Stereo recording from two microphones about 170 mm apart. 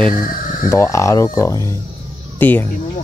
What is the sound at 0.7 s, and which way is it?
Speech, 15° left (ahead or behind).